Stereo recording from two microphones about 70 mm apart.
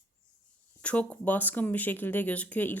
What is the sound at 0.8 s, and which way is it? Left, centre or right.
Speech, centre.